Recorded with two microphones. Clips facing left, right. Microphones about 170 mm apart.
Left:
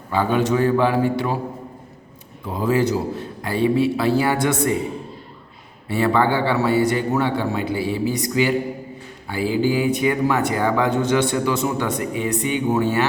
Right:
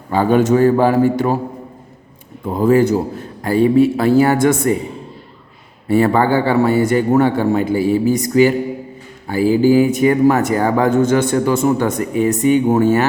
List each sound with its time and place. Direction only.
0.1 s speech: 45° right (ahead or behind)
2.4 s speech: 50° right (ahead or behind)
5.9 s speech: 45° right (ahead or behind)